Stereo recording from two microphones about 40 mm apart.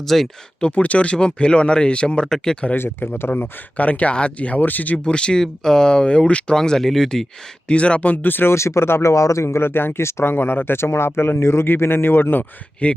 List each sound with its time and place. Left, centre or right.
0.0 s speech: centre
0.7 s speech: left
1.1 s speech: left
2.2 s speech: centre
2.7 s speech: left
3.8 s speech: left
4.6 s speech: left
5.0 s speech: left
6.5 s speech: centre
7.7 s speech: left
8.2 s speech: left
8.4 s speech: left
9.6 s speech: left
12.8 s speech: left